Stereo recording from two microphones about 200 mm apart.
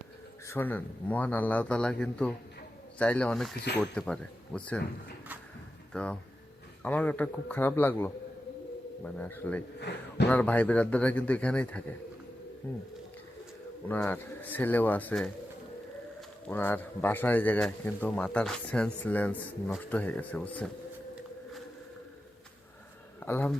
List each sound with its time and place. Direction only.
0.4 s speech: 10° left (ahead or behind)
5.9 s speech: 5° left (ahead or behind)
9.1 s speech: 10° left (ahead or behind)
9.9 s a man's voice: 60° left (ahead or behind)
10.2 s speech: 5° left (ahead or behind)
13.8 s speech: 10° left (ahead or behind)
16.5 s speech: 10° left (ahead or behind)
23.2 s speech: 10° left (ahead or behind)